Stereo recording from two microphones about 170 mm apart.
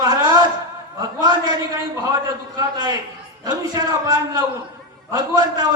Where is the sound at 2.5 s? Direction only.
25° right (ahead or behind).